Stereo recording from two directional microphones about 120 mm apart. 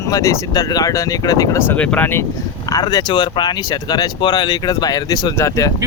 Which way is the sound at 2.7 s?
30° left (ahead or behind).